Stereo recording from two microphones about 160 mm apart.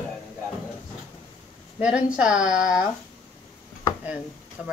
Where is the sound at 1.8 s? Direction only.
5° right (ahead or behind).